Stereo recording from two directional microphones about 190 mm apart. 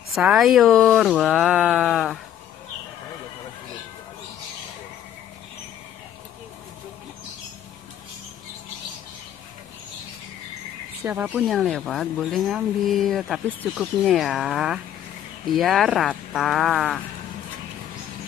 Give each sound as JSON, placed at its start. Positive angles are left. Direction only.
{"t": 0.1, "sound": "speech", "side_deg": 0}
{"t": 11.1, "sound": "speech", "side_deg": -10}